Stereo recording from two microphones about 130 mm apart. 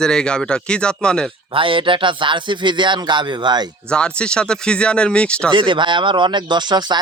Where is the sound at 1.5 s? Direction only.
40° right (ahead or behind).